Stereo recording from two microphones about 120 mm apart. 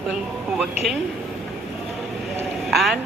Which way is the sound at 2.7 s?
Centre (ahead or behind).